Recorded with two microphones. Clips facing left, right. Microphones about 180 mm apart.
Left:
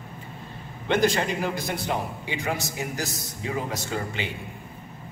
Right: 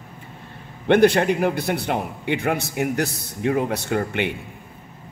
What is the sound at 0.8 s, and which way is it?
A man's voice, 60° right (ahead or behind).